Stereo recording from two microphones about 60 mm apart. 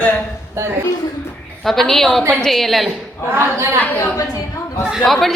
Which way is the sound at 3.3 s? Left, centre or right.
Right.